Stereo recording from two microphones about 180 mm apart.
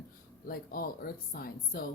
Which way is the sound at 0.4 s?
55° left (ahead or behind).